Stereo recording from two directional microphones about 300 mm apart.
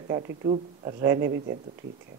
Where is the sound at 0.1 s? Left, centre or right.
Centre.